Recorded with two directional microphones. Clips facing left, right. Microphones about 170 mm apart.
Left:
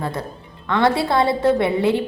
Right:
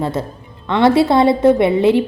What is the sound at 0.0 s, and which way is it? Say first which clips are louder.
A woman's voice: right 6 dB; 20° right (ahead or behind).